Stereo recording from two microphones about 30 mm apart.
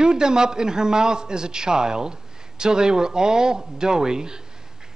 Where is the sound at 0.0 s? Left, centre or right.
Right.